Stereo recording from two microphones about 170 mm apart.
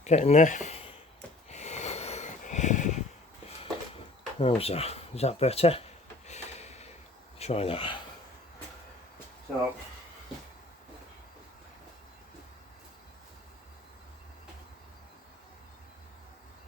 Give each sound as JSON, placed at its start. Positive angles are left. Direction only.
{"t": 0.0, "sound": "speech", "side_deg": 40}
{"t": 1.5, "sound": "sniff", "side_deg": 40}
{"t": 4.4, "sound": "speech", "side_deg": 35}
{"t": 6.2, "sound": "a sound", "side_deg": 40}
{"t": 7.3, "sound": "rub", "side_deg": 35}